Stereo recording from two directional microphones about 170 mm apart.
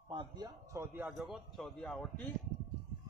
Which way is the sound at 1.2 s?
Centre (ahead or behind).